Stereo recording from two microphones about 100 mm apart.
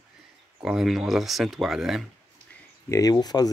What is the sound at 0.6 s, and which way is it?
Speech, 5° right (ahead or behind).